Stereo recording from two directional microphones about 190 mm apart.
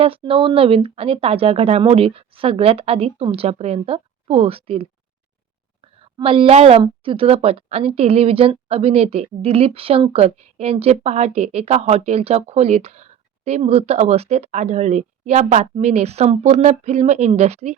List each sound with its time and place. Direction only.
0.0 s a woman's voice: 30° right (ahead or behind)